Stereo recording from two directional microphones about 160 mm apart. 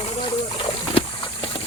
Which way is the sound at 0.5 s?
35° left (ahead or behind).